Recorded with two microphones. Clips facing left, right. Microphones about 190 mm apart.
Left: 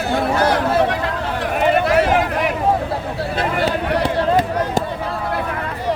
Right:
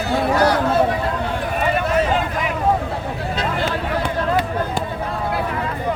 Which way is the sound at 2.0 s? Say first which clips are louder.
Left 3 dB; 80° left.